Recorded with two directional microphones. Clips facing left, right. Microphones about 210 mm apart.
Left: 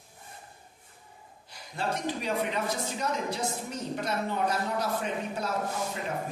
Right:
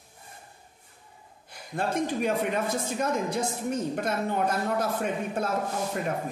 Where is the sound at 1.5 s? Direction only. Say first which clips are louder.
Right 4 dB; 50° right (ahead or behind).